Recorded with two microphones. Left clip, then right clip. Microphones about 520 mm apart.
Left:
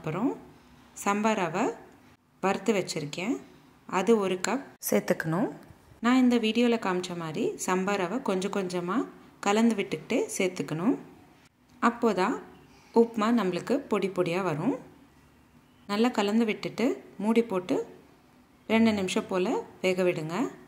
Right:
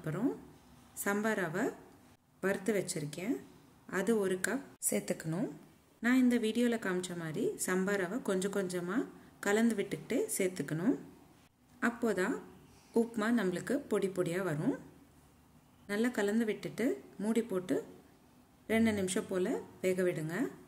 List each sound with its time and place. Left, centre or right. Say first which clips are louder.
0.9 s a woman's voice: left 7 dB; right
15.9 s a woman's voice: left 7 dB; right
18.9 s a woman's voice: left 6 dB; right